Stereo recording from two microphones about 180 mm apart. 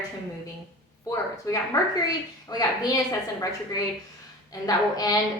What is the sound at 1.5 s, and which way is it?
A woman's voice, 20° left (ahead or behind).